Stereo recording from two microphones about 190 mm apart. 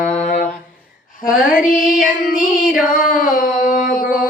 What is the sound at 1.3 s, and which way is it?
Mantra, 5° right (ahead or behind).